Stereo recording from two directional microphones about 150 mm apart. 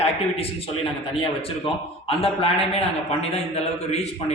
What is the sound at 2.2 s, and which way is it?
A man's voice, 40° left (ahead or behind).